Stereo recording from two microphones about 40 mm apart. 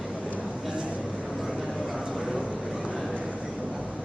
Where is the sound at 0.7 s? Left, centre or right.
Right.